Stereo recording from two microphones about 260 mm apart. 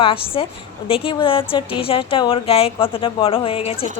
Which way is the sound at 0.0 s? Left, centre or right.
Left.